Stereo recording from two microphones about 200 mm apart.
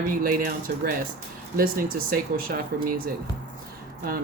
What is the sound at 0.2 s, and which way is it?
Speech, 45° right (ahead or behind).